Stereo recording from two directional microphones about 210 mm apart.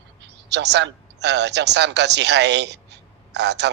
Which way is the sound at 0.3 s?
55° right (ahead or behind).